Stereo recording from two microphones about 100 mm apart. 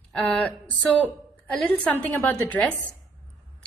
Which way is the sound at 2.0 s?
20° left (ahead or behind).